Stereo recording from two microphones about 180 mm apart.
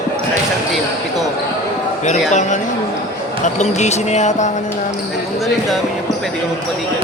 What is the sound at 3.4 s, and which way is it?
Speech, 40° left (ahead or behind).